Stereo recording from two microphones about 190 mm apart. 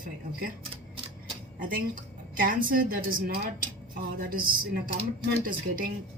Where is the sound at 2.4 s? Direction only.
45° right (ahead or behind).